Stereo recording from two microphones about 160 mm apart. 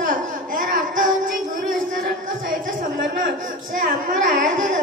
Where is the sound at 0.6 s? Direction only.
55° right (ahead or behind).